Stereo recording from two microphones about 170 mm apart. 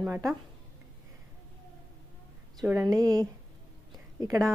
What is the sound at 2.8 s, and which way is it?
Speech, 20° right (ahead or behind).